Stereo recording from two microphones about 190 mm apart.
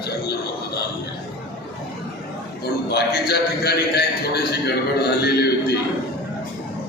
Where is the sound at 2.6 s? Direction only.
55° left (ahead or behind).